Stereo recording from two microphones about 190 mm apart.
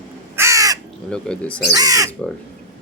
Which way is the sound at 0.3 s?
15° right (ahead or behind).